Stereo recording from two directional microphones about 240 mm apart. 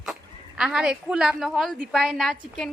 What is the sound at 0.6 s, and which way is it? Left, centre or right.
Speech, centre.